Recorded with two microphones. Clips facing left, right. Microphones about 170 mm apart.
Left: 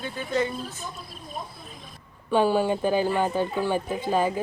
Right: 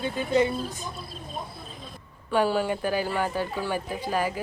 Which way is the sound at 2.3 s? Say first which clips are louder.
Left 2 dB; 15° left (ahead or behind).